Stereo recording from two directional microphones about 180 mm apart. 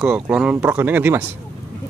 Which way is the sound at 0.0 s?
5° right (ahead or behind).